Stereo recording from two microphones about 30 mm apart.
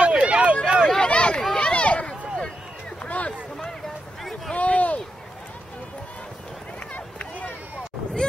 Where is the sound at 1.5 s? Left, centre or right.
Left.